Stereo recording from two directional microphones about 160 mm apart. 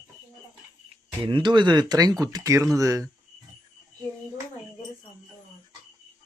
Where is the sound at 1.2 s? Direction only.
30° right (ahead or behind).